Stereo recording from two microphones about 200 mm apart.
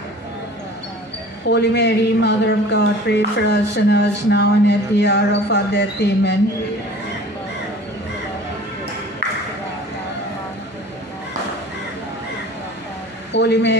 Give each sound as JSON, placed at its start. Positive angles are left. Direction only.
{"t": 1.5, "sound": "speech", "side_deg": 55}
{"t": 13.3, "sound": "speech", "side_deg": 60}